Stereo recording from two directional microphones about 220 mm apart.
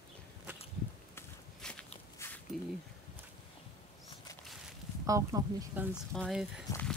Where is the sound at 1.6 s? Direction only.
5° left (ahead or behind).